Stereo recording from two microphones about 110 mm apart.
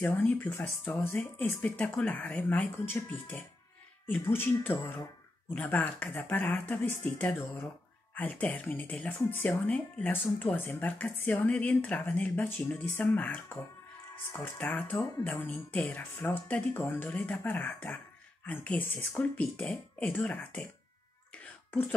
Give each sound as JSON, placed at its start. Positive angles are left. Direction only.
{"t": 0.0, "sound": "speech", "side_deg": 15}
{"t": 14.9, "sound": "speech", "side_deg": 15}